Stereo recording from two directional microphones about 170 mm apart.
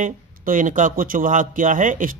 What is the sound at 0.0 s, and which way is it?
Speech, 50° right (ahead or behind).